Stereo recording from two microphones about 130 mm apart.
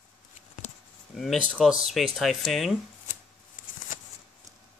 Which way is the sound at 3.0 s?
85° left.